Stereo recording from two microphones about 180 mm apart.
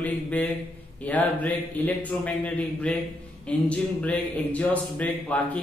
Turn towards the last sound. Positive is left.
turn(degrees=10)  # may be behind; listen again after turning